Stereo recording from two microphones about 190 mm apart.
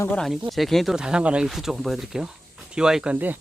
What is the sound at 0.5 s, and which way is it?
Speech, centre (ahead or behind).